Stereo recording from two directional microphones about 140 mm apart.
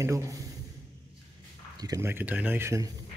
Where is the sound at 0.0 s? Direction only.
20° right (ahead or behind).